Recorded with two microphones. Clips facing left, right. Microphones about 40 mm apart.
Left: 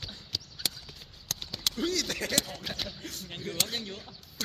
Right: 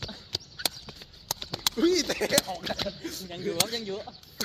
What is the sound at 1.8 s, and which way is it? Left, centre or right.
Speech, right.